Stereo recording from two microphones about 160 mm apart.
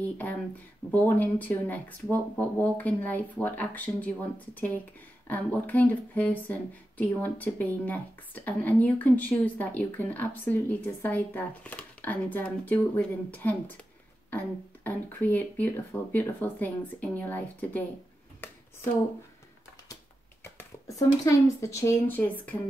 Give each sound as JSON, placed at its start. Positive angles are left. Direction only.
{"t": 0.9, "sound": "speech", "side_deg": 10}
{"t": 5.3, "sound": "speech", "side_deg": 10}
{"t": 20.5, "sound": "speech", "side_deg": 20}